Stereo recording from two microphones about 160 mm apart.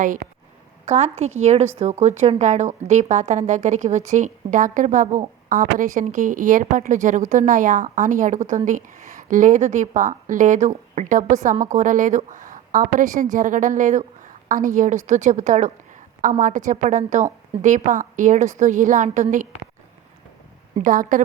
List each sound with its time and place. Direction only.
0.9 s speech: 45° right (ahead or behind)
20.7 s a woman's voice: 55° right (ahead or behind)